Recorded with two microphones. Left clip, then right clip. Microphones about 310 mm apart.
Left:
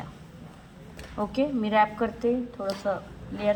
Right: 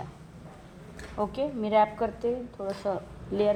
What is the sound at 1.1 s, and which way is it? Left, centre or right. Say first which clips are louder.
Speech: left 2 dB; right.